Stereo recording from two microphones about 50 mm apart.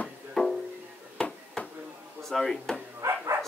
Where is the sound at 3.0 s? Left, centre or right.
Right.